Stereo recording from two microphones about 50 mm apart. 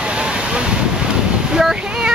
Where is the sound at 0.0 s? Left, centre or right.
Right.